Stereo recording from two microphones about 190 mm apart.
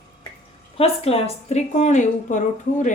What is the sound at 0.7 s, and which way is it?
A woman's voice, 30° left (ahead or behind).